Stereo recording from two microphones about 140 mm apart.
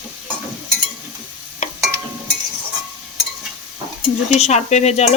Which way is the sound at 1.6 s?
55° left (ahead or behind).